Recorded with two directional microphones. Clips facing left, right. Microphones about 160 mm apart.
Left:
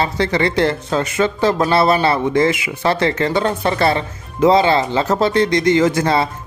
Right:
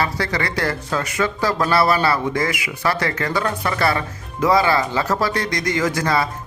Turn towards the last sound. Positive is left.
turn(degrees=25)  # may be behind; listen again after turning